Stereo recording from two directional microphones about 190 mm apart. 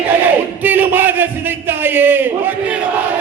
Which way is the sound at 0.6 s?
10° right (ahead or behind).